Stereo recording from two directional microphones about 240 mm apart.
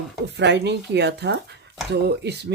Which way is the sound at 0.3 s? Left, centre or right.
Right.